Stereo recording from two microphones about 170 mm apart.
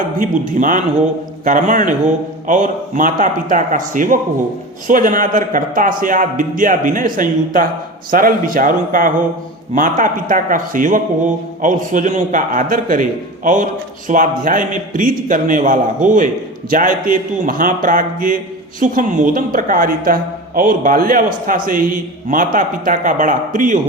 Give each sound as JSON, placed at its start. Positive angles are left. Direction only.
{"t": 0.2, "sound": "a man's voice", "side_deg": -50}